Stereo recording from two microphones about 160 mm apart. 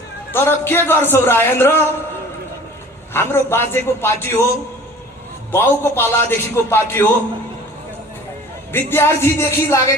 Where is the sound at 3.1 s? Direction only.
15° left (ahead or behind).